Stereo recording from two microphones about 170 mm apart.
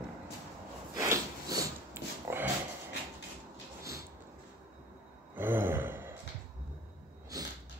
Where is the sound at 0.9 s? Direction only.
20° right (ahead or behind).